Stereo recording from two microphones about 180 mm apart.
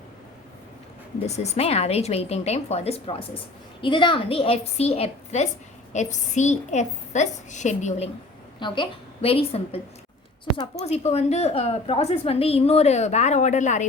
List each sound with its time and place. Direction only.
1.4 s a woman's voice: 35° left (ahead or behind)
8.5 s a woman's voice: 25° left (ahead or behind); by 13.8 s 40° left (ahead or behind)